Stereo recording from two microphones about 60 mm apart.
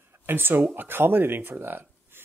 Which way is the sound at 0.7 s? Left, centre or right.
Right.